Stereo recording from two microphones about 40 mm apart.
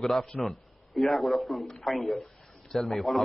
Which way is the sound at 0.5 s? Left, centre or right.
Centre.